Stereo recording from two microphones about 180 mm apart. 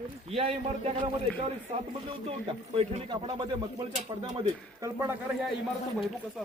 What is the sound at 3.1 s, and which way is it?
A man's voice, 25° right (ahead or behind).